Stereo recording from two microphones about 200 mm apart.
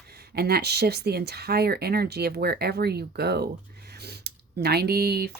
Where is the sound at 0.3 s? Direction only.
50° right (ahead or behind).